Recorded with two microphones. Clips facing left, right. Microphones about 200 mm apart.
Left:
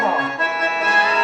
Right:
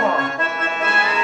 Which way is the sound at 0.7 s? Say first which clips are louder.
Left 1 dB; 40° left (ahead or behind).